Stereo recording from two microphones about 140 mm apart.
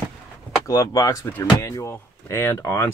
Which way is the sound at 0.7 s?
25° left (ahead or behind).